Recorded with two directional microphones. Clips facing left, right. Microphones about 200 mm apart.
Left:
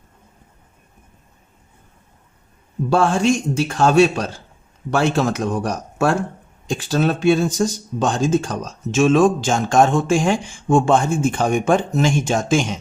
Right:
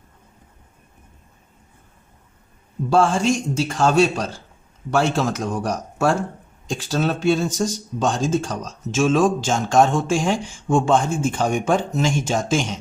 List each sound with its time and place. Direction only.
2.9 s speech: 60° left (ahead or behind)